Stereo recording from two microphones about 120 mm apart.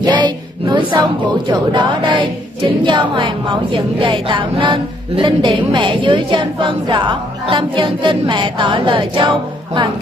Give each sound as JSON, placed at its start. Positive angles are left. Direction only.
{"t": 0.0, "sound": "child singing", "side_deg": -40}
{"t": 2.8, "sound": "speech", "side_deg": -40}